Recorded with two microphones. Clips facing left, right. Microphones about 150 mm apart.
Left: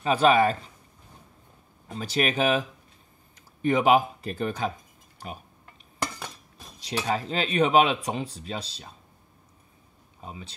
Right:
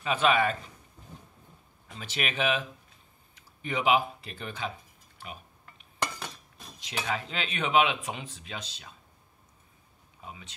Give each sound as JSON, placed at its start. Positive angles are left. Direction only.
{"t": 0.0, "sound": "speech", "side_deg": 35}
{"t": 1.9, "sound": "speech", "side_deg": 40}
{"t": 6.8, "sound": "speech", "side_deg": 35}
{"t": 10.2, "sound": "speech", "side_deg": 35}